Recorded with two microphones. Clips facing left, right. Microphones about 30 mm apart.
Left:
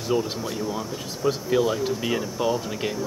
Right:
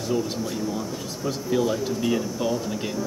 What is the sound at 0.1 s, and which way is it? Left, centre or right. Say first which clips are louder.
Speech: left 2 dB; centre.